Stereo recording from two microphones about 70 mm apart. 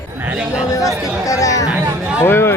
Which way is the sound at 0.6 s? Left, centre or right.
Left.